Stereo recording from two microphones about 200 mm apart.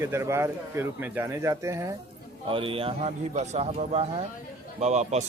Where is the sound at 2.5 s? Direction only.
25° right (ahead or behind).